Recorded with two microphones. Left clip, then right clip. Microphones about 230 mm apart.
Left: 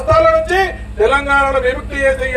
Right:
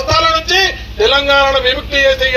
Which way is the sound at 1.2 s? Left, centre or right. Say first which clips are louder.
Right 3 dB; left.